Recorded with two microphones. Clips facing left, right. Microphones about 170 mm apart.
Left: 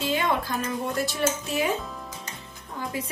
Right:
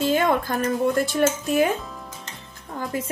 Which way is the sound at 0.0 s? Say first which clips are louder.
Right 5 dB; 45° right (ahead or behind).